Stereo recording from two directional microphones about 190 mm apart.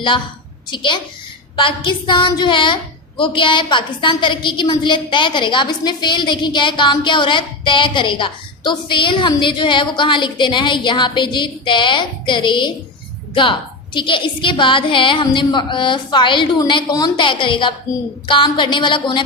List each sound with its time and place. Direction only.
0.7 s a woman's voice: 25° left (ahead or behind)